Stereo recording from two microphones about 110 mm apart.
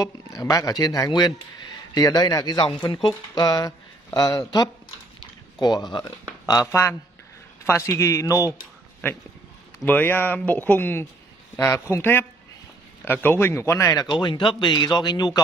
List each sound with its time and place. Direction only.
0.0 s speech: 30° left (ahead or behind)
14.0 s speech: 45° left (ahead or behind)